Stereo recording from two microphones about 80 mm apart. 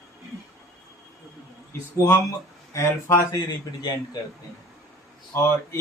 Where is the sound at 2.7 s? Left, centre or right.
Left.